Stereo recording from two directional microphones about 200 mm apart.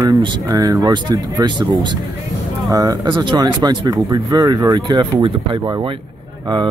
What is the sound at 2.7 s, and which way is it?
Speech, 20° right (ahead or behind).